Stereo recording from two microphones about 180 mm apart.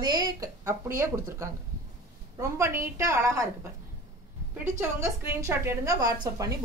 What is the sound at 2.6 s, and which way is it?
Speech, 15° right (ahead or behind).